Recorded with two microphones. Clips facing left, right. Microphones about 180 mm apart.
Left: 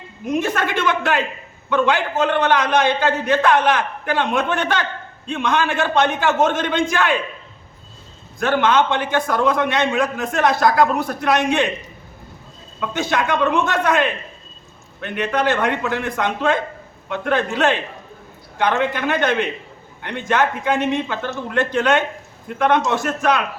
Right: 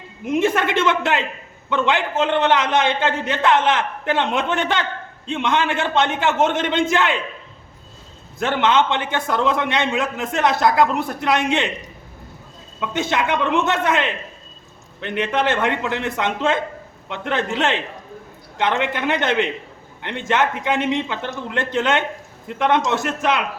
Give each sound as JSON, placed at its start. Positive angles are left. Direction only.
{"t": 0.3, "sound": "a man's voice", "side_deg": -20}
{"t": 8.4, "sound": "a man's voice", "side_deg": -20}
{"t": 12.8, "sound": "a man's voice", "side_deg": -20}